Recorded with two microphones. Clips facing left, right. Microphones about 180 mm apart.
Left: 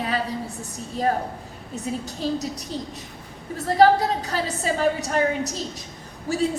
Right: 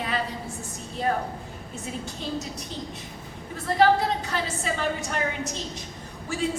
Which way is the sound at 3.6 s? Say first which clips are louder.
Left 4 dB; 40° left (ahead or behind).